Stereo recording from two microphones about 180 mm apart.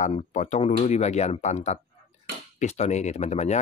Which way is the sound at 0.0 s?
40° left (ahead or behind).